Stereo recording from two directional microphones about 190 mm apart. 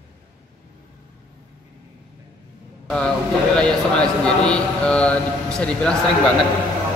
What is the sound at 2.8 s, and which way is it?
Speech, 5° left (ahead or behind).